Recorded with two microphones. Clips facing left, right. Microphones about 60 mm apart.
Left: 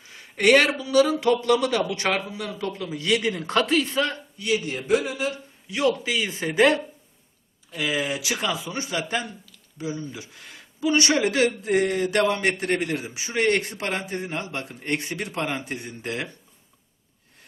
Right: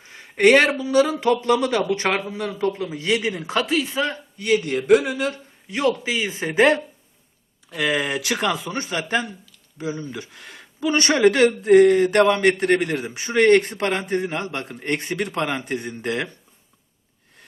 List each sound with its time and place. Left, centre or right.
0.0 s speech: right; by 3.5 s centre
3.5 s speech: centre
4.4 s speech: right
6.0 s speech: right
7.7 s speech: right
10.1 s speech: right
10.8 s speech: right